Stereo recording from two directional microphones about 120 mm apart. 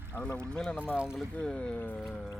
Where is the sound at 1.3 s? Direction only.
10° left (ahead or behind).